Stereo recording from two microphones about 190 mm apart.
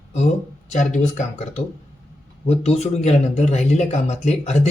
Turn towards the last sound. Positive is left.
turn(degrees=35)  # may be behind; listen again after turning